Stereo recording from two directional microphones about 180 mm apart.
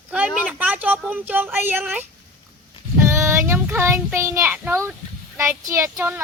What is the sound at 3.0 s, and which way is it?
Child singing, 15° right (ahead or behind).